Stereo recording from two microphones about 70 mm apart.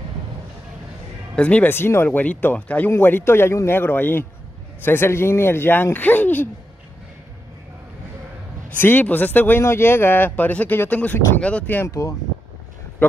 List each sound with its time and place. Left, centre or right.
1.3 s speech: centre
1.7 s a man's voice: left
2.0 s a man's voice: left
8.6 s speech: left
9.6 s speech: left